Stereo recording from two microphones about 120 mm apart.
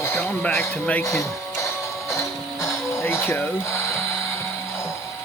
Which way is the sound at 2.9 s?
20° left (ahead or behind).